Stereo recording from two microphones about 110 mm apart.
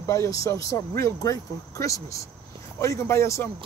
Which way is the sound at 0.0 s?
25° left (ahead or behind).